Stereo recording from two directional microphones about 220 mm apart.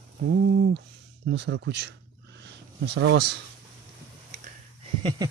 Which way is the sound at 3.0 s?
55° right (ahead or behind).